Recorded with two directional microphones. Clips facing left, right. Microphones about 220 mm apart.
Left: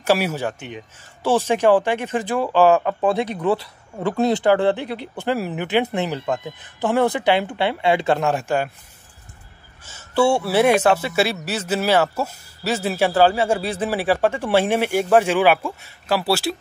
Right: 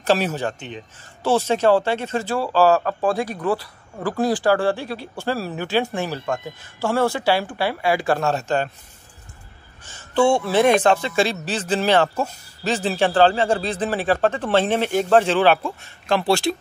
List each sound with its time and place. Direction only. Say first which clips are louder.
0.0 s speech: even; 10° left (ahead or behind)
9.8 s speech: even; 10° left (ahead or behind)